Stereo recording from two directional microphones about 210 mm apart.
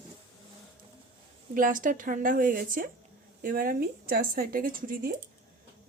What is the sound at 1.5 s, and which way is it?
A woman's voice, 40° right (ahead or behind).